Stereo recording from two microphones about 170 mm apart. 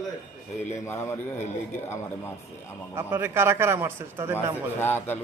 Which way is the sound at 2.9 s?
10° right (ahead or behind).